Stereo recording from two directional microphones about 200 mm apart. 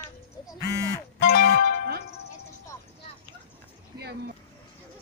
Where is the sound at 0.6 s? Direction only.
20° left (ahead or behind).